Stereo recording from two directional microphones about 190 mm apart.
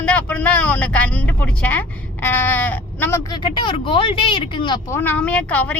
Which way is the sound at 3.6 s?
25° left (ahead or behind).